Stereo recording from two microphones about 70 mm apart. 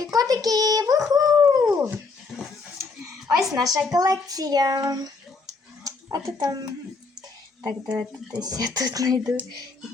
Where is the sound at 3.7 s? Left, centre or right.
Right.